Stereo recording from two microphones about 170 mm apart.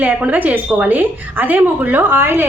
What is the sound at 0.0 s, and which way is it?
A woman's voice, 10° right (ahead or behind).